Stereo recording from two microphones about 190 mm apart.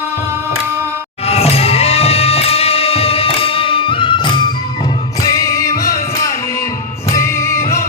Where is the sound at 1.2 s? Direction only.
30° left (ahead or behind).